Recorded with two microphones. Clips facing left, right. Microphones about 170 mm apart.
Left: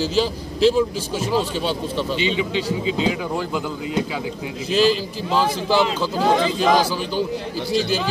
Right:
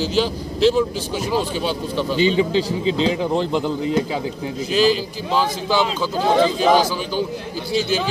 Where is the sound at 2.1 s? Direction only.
40° right (ahead or behind).